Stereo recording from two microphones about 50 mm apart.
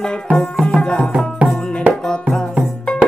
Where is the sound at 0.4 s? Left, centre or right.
Centre.